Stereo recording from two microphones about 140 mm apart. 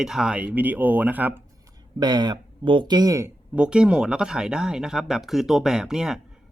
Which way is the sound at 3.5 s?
5° right (ahead or behind).